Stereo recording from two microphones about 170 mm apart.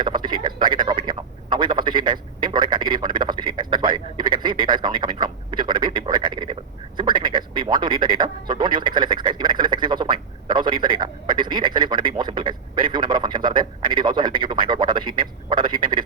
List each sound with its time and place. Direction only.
0.0 s speech: 25° right (ahead or behind)